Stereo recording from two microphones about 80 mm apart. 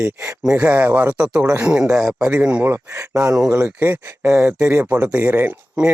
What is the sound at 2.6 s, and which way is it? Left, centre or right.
Speech, right.